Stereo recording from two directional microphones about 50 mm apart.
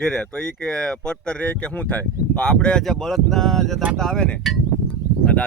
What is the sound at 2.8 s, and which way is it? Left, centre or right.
Speech, centre.